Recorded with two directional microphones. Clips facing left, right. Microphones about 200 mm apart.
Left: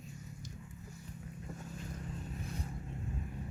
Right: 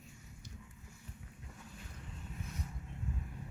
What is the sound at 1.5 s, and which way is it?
Boat, 45° left (ahead or behind).